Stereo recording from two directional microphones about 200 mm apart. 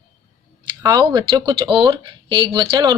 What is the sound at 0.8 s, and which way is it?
Speech, 20° right (ahead or behind).